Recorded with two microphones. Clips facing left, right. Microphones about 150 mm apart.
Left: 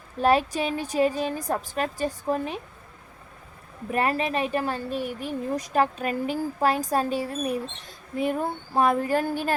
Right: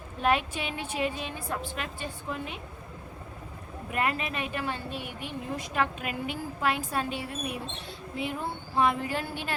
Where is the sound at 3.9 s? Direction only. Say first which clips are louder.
Left 6 dB; 35° left (ahead or behind).